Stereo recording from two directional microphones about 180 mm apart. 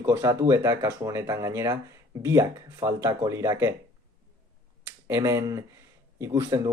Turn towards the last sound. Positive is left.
turn(degrees=-15)  # may be behind; listen again after turning